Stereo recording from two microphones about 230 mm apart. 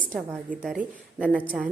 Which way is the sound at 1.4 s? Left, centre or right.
Centre.